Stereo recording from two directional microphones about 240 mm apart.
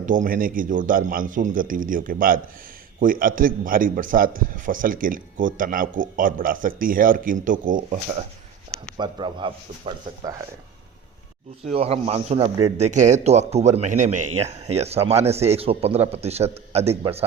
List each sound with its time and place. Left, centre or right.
0.0 s a man's voice: right
9.0 s a man's voice: centre
11.7 s a man's voice: right
12.7 s a man's voice: right